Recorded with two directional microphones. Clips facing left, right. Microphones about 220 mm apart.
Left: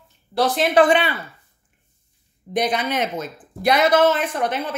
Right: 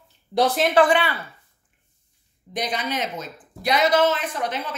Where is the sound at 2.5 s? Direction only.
55° left (ahead or behind).